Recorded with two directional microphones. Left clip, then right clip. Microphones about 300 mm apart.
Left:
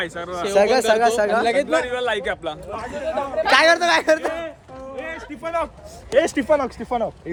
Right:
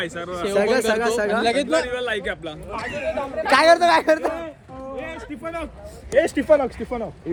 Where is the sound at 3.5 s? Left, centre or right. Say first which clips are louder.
Right 1 dB; centre.